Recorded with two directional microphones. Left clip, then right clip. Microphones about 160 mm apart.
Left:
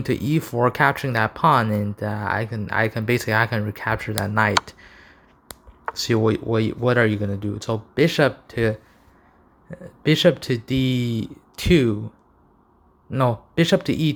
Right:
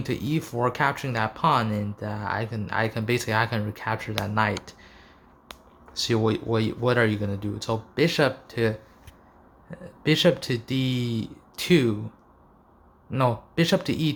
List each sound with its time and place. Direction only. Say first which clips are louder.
0.0 s speech: left 5 dB; 35° left (ahead or behind)
4.6 s a sound: left 4 dB; 30° left (ahead or behind)
5.9 s speech: left 4 dB; 30° left (ahead or behind)
13.1 s speech: left 3 dB; 25° left (ahead or behind)